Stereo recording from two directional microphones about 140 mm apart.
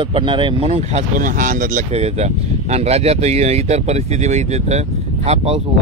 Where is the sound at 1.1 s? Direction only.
70° right (ahead or behind).